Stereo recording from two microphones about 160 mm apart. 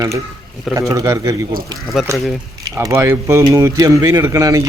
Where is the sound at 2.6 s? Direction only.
20° right (ahead or behind).